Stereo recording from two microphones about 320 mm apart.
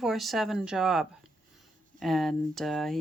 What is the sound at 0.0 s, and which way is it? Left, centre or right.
Speech, centre.